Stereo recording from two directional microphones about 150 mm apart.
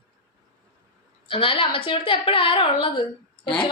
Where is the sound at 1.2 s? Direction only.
35° left (ahead or behind).